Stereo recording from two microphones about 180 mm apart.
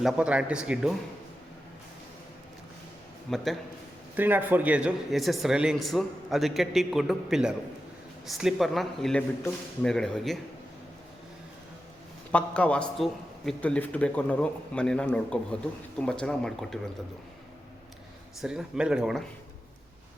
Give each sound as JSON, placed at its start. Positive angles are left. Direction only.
{"t": 0.0, "sound": "speech", "side_deg": -5}
{"t": 3.2, "sound": "speech", "side_deg": 0}
{"t": 4.2, "sound": "speech", "side_deg": -10}
{"t": 12.3, "sound": "a man's voice", "side_deg": 5}
{"t": 18.3, "sound": "speech", "side_deg": -5}